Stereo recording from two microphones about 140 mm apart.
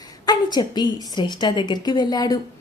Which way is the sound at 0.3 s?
30° left (ahead or behind).